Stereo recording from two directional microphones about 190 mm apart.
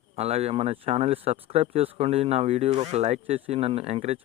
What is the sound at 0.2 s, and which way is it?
Speech, 35° right (ahead or behind).